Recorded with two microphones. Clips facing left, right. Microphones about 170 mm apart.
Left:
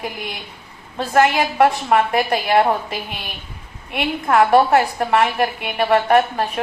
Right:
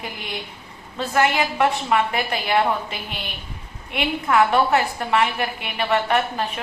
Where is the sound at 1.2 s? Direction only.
50° left (ahead or behind).